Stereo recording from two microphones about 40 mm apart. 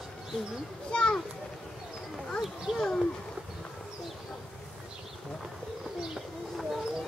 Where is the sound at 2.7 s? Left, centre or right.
Centre.